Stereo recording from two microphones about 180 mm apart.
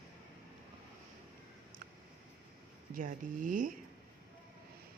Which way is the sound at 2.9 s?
50° right (ahead or behind).